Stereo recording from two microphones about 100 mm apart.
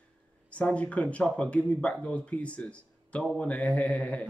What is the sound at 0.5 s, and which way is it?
Speech, 15° left (ahead or behind).